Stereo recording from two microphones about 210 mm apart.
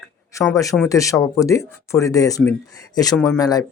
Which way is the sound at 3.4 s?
20° left (ahead or behind).